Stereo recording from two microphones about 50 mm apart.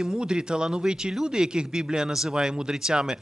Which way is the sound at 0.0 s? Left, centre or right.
Centre.